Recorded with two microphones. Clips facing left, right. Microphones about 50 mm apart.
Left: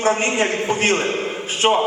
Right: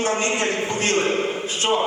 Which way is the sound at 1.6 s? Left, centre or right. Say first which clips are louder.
Left 5 dB; left.